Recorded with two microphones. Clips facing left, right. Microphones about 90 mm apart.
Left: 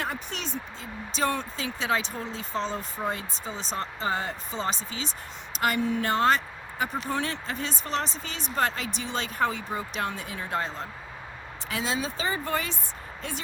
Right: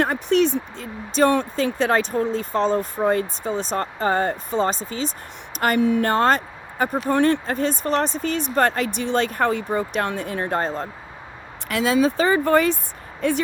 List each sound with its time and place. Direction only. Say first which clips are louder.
0.0 s speech: right 15 dB; 60° right (ahead or behind)
11.7 s speech: right 11 dB; 65° right (ahead or behind)